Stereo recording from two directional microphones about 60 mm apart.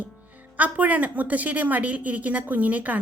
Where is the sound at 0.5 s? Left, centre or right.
Right.